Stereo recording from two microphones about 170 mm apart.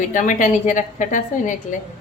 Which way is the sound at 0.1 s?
50° left (ahead or behind).